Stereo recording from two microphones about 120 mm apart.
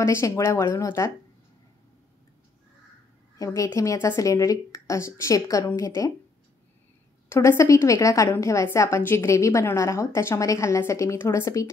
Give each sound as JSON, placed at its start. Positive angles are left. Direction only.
{"t": 0.0, "sound": "a woman's voice", "side_deg": 25}
{"t": 3.3, "sound": "a woman's voice", "side_deg": 25}
{"t": 7.2, "sound": "a woman's voice", "side_deg": 25}